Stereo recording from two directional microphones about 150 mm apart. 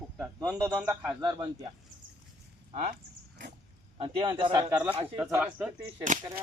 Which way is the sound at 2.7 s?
55° right (ahead or behind).